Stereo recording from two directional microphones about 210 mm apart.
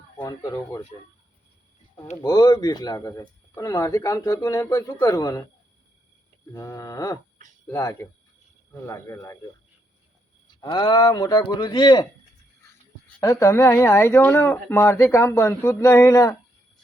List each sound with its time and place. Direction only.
0.2 s speech: 15° left (ahead or behind)
2.2 s speech: 20° left (ahead or behind)
6.5 s speech: 15° left (ahead or behind)
10.6 s speech: 20° left (ahead or behind)
13.1 s speech: 15° left (ahead or behind)